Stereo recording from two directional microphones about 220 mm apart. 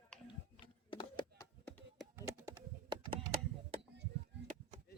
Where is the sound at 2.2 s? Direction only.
15° right (ahead or behind).